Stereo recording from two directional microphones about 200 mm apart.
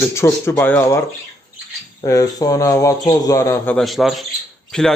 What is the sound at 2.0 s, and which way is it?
Speech, 15° left (ahead or behind).